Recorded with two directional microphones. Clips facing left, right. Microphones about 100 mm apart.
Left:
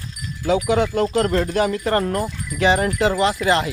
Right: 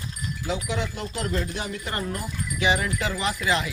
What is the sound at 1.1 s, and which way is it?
Music, 60° left (ahead or behind).